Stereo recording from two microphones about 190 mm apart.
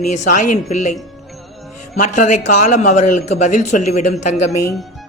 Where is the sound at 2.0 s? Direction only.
40° left (ahead or behind).